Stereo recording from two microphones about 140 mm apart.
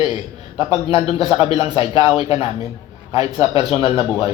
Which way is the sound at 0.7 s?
45° left (ahead or behind).